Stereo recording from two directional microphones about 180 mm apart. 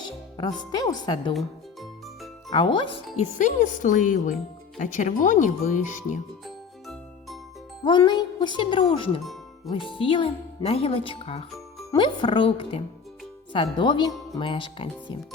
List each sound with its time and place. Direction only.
0.7 s speech: 20° left (ahead or behind)
1.3 s music: centre (ahead or behind)
2.5 s speech: 25° left (ahead or behind)
3.2 s speech: 45° left (ahead or behind)
6.4 s music: centre (ahead or behind)
7.9 s speech: 25° left (ahead or behind)